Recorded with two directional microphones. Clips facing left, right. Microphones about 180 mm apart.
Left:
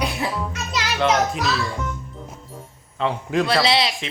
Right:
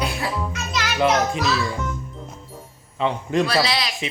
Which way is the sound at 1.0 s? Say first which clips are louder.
Right 1 dB; centre (ahead or behind).